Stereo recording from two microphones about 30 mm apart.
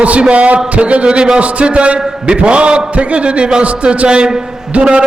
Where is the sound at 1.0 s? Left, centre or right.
Right.